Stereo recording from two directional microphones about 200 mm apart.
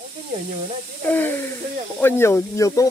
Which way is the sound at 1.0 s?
10° left (ahead or behind).